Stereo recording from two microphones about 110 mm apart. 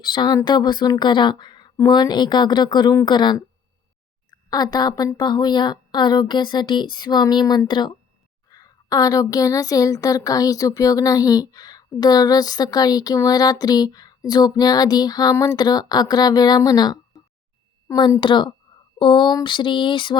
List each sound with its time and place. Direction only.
0.0 s a woman's voice: 40° left (ahead or behind)
18.2 s a woman's voice: 45° left (ahead or behind)